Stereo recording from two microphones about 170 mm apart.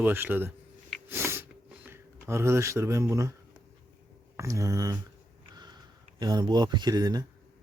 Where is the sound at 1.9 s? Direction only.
15° right (ahead or behind).